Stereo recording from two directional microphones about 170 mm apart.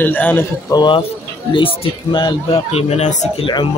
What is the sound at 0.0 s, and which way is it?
Speech, 10° left (ahead or behind).